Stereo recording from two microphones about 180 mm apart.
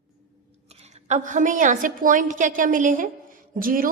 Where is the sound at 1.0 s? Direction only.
45° right (ahead or behind).